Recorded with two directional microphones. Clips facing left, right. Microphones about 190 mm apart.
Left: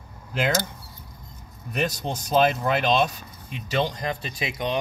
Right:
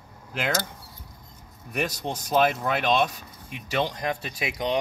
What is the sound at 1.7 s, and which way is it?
Speech, 10° right (ahead or behind).